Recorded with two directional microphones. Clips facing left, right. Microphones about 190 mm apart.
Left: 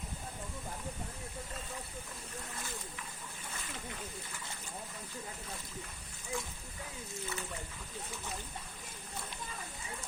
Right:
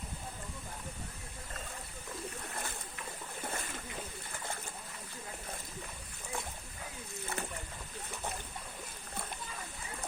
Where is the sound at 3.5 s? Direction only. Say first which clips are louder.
Right 5 dB; 50° right (ahead or behind).